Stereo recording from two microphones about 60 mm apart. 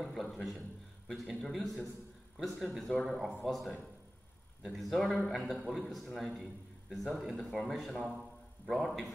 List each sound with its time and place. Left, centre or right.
0.0 s a man's voice: centre
6.9 s a man's voice: centre
7.2 s a man's voice: centre